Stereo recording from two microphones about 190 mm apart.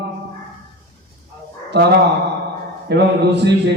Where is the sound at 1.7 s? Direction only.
65° right (ahead or behind).